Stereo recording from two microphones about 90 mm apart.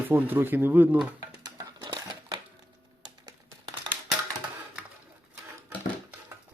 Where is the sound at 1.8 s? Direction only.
55° right (ahead or behind).